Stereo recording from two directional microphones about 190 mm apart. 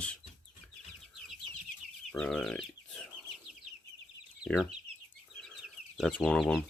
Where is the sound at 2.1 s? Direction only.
5° left (ahead or behind).